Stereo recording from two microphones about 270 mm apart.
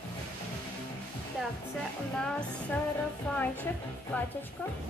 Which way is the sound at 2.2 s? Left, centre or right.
Centre.